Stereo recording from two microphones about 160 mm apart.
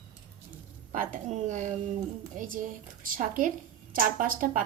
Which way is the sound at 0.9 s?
50° right (ahead or behind).